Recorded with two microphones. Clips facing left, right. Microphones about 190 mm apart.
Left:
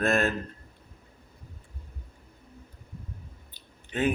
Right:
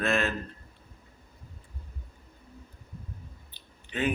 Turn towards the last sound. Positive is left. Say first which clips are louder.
# left 3 dB
turn(degrees=45)  # may be behind; listen again after turning